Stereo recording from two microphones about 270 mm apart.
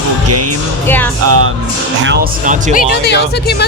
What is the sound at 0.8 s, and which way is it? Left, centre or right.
Speech, centre.